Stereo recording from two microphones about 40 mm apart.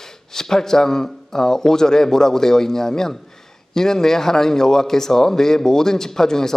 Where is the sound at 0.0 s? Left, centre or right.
Centre.